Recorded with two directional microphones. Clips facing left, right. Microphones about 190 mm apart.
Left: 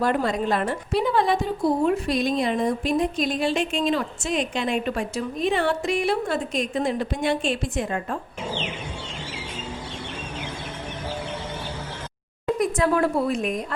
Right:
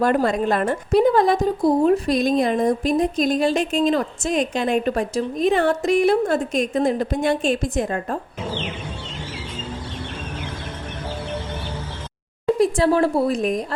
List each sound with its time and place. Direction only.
0.0 s a woman's voice: 50° right (ahead or behind)
12.5 s a woman's voice: 30° right (ahead or behind)